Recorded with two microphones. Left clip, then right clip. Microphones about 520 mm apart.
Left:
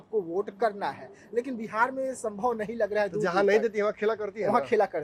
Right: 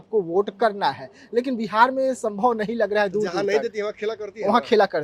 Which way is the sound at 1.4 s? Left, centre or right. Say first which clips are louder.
Right 7 dB; right.